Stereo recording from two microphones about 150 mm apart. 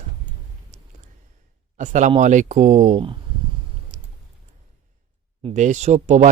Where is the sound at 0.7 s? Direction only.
50° right (ahead or behind).